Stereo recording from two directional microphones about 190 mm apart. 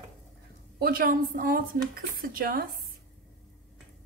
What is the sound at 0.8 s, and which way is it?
A woman's voice, 50° right (ahead or behind).